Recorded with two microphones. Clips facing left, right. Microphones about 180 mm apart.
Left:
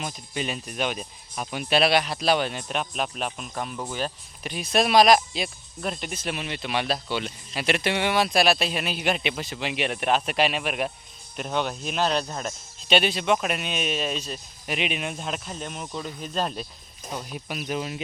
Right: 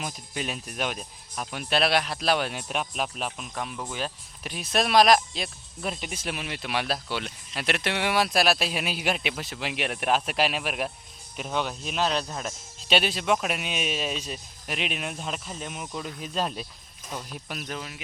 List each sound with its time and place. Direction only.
0.0 s speech: centre (ahead or behind)
17.7 s speech: 25° left (ahead or behind)